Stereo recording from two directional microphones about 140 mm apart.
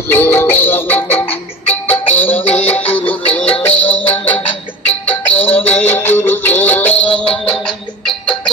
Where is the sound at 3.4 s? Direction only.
45° left (ahead or behind).